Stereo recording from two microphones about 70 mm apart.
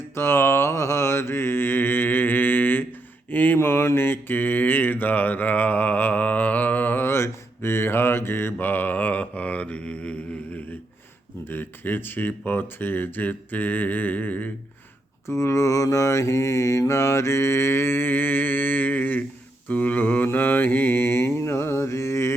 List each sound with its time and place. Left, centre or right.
0.1 s mantra: left; by 10.6 s centre
11.4 s speech: left
15.3 s mantra: left